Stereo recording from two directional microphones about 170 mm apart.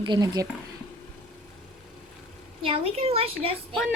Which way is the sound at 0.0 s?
25° right (ahead or behind).